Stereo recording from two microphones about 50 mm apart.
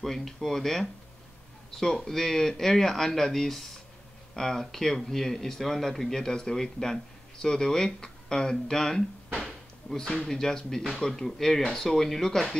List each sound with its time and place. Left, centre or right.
0.0 s speech: centre